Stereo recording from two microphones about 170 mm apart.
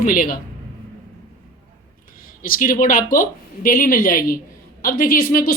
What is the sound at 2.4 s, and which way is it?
Speech, 55° left (ahead or behind).